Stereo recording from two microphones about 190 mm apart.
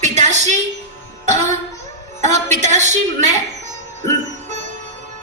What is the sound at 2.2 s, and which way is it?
A woman's voice, 40° right (ahead or behind).